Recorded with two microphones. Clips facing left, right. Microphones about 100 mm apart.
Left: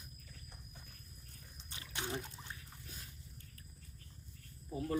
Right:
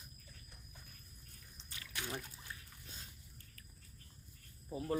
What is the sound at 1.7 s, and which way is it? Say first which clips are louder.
Trickle: left 2 dB; 25° left (ahead or behind).